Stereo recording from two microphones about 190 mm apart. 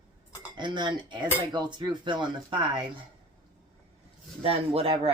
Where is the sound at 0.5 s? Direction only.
25° right (ahead or behind).